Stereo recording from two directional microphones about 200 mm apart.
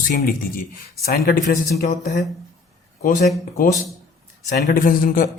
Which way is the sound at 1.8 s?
40° left (ahead or behind).